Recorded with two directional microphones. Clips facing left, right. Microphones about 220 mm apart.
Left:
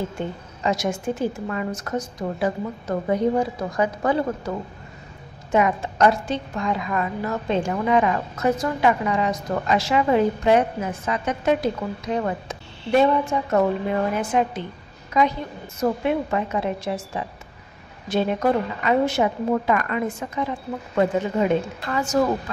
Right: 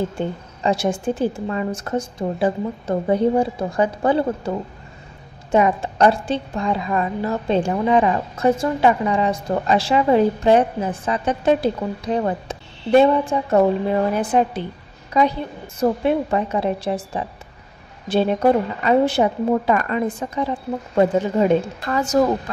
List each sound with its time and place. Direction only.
0.7 s a woman's voice: 30° right (ahead or behind)
5.5 s a woman's voice: 30° right (ahead or behind)